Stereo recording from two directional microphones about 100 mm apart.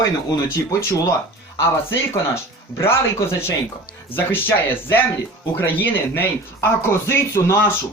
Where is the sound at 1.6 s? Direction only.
25° left (ahead or behind).